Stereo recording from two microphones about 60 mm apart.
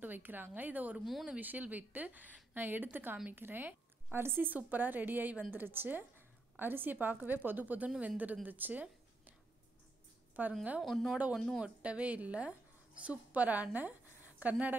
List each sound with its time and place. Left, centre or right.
0.0 s a woman's voice: right
10.4 s a woman's voice: right
10.8 s speech: centre
11.6 s a woman's voice: centre